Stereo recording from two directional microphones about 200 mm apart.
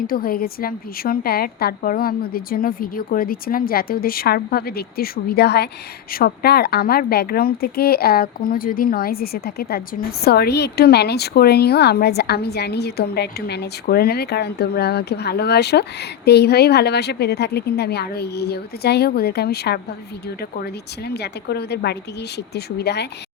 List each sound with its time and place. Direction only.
0.0 s a woman's voice: 45° left (ahead or behind)
21.1 s a woman's voice: 55° left (ahead or behind)